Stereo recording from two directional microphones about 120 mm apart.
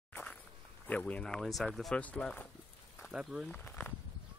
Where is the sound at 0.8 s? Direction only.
10° left (ahead or behind).